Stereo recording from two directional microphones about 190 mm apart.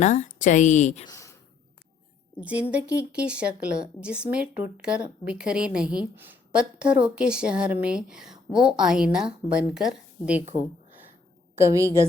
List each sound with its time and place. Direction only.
0.0 s a woman's voice: 40° left (ahead or behind)
1.0 s a sound: 15° left (ahead or behind)
2.4 s speech: 5° right (ahead or behind)
11.5 s a woman's voice: 15° right (ahead or behind)